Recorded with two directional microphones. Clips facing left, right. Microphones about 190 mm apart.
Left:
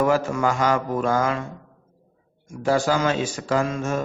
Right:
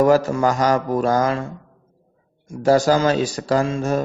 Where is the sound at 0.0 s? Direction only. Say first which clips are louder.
Right 5 dB; 40° right (ahead or behind).